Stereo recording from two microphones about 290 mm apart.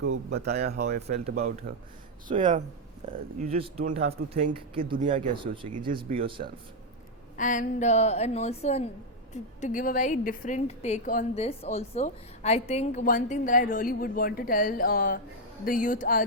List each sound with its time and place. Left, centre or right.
0.0 s speech: right
1.1 s speech: right
7.3 s a woman's voice: left